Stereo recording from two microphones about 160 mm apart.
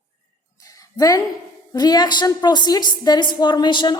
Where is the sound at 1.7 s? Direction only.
25° left (ahead or behind).